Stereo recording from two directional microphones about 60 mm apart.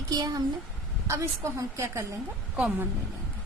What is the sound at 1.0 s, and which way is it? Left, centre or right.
A woman's voice, right.